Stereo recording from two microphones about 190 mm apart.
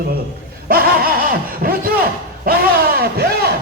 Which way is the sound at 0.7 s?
50° right (ahead or behind).